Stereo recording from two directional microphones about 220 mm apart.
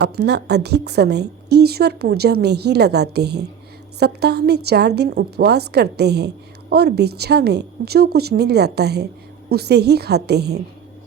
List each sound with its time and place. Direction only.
0.0 s a woman's voice: 50° right (ahead or behind)